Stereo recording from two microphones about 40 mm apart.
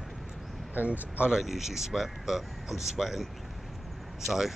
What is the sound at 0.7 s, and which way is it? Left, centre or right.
Speech, right.